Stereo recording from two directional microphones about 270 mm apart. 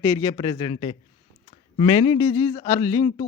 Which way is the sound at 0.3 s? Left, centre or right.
Centre.